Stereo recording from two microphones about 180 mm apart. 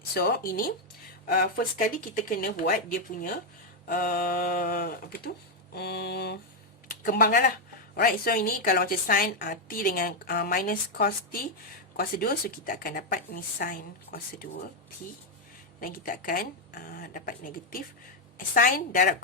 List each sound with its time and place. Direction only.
0.1 s a woman's voice: 55° left (ahead or behind)
15.8 s a woman's voice: 50° left (ahead or behind)